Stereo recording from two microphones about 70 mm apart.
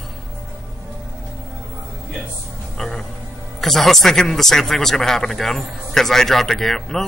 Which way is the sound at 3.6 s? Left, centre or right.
Centre.